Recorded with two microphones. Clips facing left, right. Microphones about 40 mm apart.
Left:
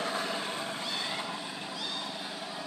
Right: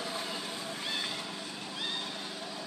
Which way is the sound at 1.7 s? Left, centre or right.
Centre.